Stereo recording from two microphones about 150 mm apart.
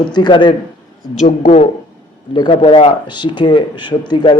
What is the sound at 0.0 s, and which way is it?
Speech, 30° left (ahead or behind).